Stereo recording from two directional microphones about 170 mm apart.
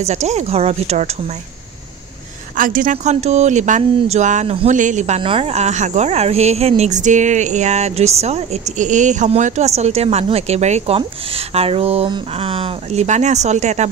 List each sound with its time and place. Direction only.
0.0 s speech: 40° right (ahead or behind)
2.5 s speech: 55° right (ahead or behind)